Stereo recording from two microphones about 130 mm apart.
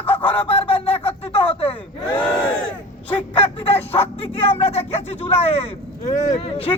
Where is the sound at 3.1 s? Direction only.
45° left (ahead or behind).